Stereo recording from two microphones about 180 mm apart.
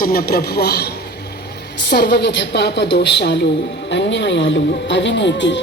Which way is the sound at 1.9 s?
65° left (ahead or behind).